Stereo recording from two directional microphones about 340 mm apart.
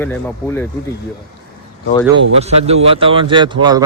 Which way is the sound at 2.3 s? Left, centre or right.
Centre.